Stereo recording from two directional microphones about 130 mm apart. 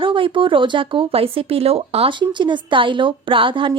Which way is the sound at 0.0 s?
40° right (ahead or behind).